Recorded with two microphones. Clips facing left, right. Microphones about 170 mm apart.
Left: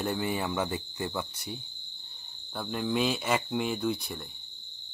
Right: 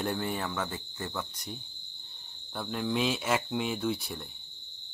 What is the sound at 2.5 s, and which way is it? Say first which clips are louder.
Cricket: left 1 dB; centre (ahead or behind).